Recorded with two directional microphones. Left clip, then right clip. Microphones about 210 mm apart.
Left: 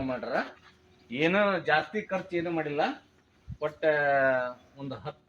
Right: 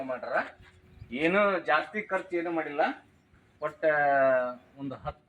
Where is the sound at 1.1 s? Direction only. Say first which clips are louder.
Even; 20° left (ahead or behind).